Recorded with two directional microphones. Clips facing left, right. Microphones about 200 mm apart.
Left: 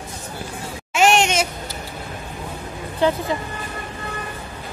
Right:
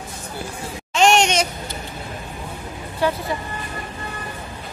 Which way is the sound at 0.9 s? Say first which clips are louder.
Right 1 dB; centre (ahead or behind).